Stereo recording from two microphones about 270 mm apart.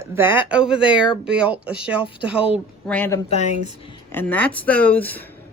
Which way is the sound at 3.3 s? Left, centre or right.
Left.